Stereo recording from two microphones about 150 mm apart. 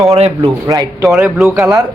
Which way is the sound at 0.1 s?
40° right (ahead or behind).